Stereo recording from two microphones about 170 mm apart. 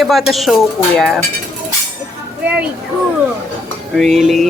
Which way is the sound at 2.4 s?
10° right (ahead or behind).